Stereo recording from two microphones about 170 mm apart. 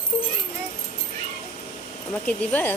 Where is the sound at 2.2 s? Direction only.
10° left (ahead or behind).